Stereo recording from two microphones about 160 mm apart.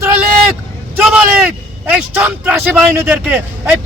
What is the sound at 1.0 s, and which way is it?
Speech, 5° right (ahead or behind).